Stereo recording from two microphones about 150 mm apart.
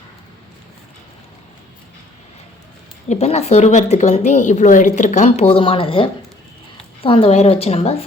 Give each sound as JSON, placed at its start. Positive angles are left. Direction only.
{"t": 3.1, "sound": "a woman's voice", "side_deg": 45}